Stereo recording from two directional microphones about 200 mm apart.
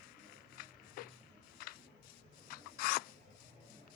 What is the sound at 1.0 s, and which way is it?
Music, 45° left (ahead or behind).